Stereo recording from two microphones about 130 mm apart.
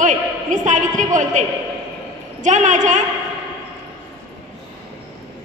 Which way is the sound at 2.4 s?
70° right (ahead or behind).